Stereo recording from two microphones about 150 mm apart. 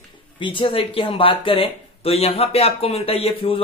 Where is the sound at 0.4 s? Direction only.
35° left (ahead or behind).